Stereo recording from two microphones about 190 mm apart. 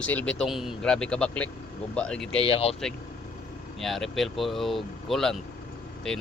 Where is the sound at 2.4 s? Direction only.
30° left (ahead or behind).